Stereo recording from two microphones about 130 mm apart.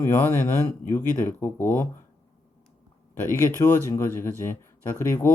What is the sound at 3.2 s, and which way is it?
Speech, 20° left (ahead or behind).